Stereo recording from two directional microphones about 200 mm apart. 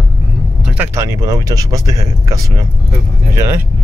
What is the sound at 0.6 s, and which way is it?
Speech, 10° right (ahead or behind).